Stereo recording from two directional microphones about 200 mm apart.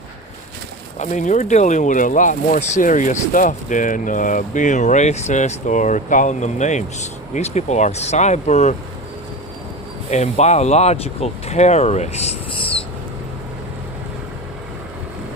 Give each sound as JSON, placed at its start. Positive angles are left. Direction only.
{"t": 0.9, "sound": "speech", "side_deg": 35}
{"t": 10.1, "sound": "speech", "side_deg": 35}